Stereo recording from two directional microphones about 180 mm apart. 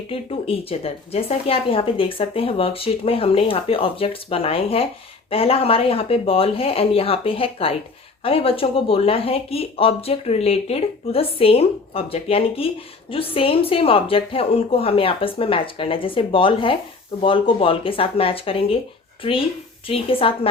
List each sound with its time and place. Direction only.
0.1 s speech: 30° left (ahead or behind)
19.9 s speech: 30° left (ahead or behind)